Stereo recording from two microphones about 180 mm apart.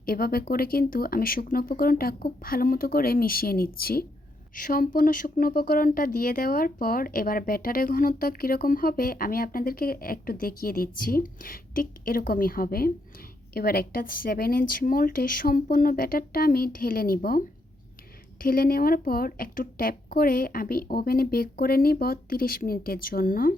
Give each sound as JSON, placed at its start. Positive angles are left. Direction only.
{"t": 0.0, "sound": "speech", "side_deg": 55}
{"t": 18.4, "sound": "speech", "side_deg": 55}